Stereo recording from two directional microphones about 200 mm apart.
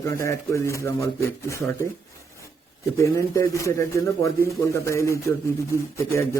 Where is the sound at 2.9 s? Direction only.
15° left (ahead or behind).